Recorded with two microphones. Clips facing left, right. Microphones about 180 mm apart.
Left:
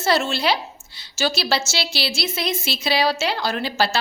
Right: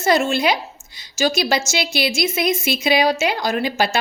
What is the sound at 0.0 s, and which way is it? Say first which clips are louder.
Speech: right 3 dB; 15° right (ahead or behind).